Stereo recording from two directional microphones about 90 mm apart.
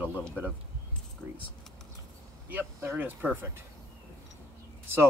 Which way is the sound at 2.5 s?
25° right (ahead or behind).